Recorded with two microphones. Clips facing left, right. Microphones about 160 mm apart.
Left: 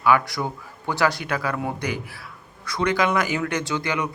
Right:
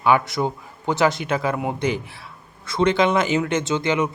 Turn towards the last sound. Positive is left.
turn(degrees=-20)  # may be behind; listen again after turning